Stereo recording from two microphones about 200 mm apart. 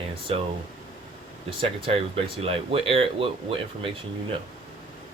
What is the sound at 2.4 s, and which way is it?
Speech, 30° right (ahead or behind).